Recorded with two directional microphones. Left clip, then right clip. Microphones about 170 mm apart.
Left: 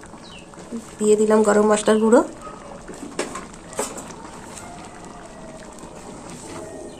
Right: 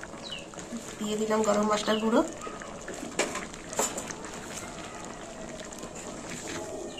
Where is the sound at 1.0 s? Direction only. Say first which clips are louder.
Left 11 dB; 90° left.